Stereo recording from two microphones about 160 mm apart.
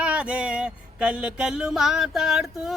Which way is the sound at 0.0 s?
5° right (ahead or behind).